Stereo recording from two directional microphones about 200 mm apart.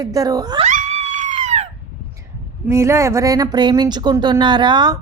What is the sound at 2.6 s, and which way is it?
A woman's voice, 15° right (ahead or behind).